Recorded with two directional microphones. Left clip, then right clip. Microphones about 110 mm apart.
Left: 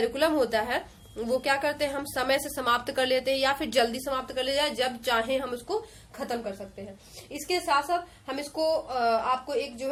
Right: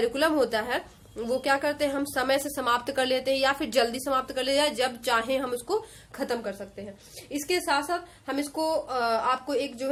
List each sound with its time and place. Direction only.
0.0 s a woman's voice: 30° right (ahead or behind)
6.1 s a woman's voice: 60° right (ahead or behind)